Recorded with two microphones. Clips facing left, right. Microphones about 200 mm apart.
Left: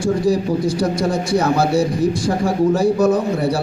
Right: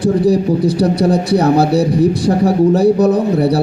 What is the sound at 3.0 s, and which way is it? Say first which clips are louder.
Speech: right 3 dB; 35° right (ahead or behind).